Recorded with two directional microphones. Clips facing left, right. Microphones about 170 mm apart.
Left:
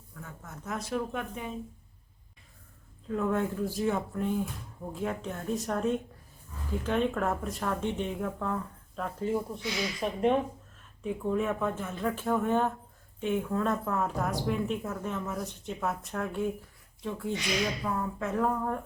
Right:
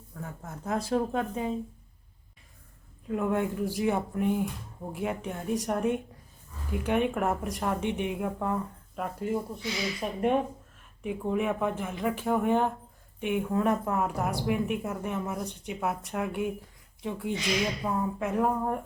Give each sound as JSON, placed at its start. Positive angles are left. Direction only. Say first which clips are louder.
{"t": 0.2, "sound": "speech", "louder": "right 5 dB", "side_deg": -30}
{"t": 3.1, "sound": "a woman's voice", "louder": "right 1 dB", "side_deg": -15}